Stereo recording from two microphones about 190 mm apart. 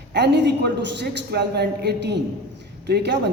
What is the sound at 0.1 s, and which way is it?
Speech, 65° right (ahead or behind).